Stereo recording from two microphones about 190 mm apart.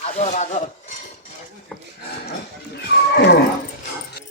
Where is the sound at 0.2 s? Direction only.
40° left (ahead or behind).